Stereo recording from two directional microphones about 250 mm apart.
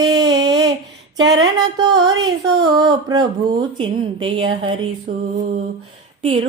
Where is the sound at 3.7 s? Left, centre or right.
Centre.